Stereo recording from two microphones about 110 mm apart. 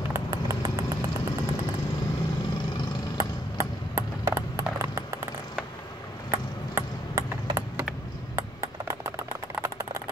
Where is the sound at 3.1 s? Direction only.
25° right (ahead or behind).